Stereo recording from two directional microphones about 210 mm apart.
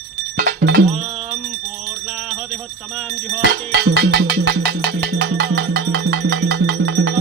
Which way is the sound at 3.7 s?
55° right (ahead or behind).